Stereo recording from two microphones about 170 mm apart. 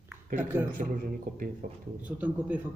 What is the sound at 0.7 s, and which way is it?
Speech, 55° right (ahead or behind).